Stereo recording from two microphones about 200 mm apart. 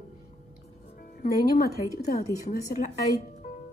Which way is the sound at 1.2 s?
50° left (ahead or behind).